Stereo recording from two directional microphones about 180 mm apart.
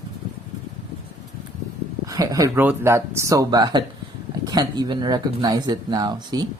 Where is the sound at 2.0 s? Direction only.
20° right (ahead or behind).